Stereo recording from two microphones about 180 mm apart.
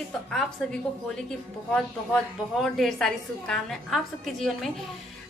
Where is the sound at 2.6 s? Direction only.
Centre (ahead or behind).